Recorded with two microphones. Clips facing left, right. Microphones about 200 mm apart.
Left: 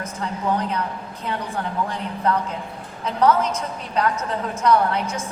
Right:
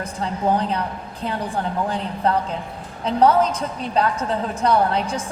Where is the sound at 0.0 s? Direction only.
30° right (ahead or behind).